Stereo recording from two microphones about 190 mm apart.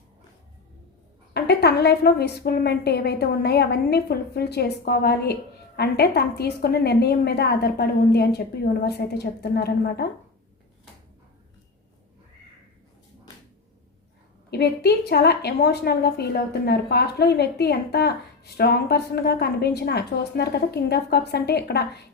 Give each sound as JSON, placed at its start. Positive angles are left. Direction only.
{"t": 1.3, "sound": "a woman's voice", "side_deg": 60}
{"t": 14.5, "sound": "a woman's voice", "side_deg": 55}